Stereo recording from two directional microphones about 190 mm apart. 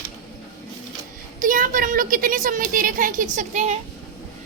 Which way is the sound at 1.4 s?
45° right (ahead or behind).